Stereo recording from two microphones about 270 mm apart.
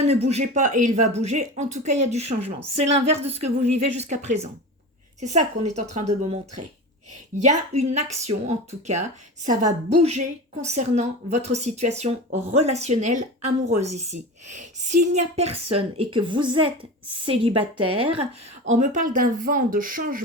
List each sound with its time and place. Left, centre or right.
0.0 s a woman's voice: right
7.4 s a woman's voice: right